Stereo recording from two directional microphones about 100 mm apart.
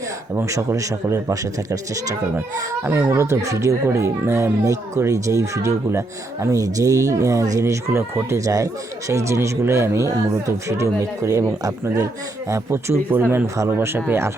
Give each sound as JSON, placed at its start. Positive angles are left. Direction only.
{"t": 0.3, "sound": "speech", "side_deg": -30}
{"t": 2.8, "sound": "speech", "side_deg": -20}